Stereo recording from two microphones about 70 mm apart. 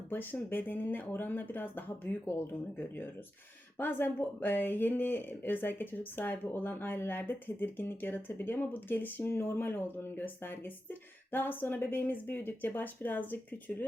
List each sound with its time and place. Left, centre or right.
0.1 s speech: left